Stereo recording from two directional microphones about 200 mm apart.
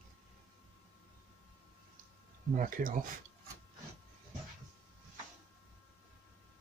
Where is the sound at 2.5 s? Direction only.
40° right (ahead or behind).